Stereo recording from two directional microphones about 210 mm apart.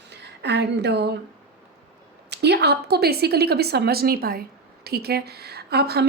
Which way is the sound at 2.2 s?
50° right (ahead or behind).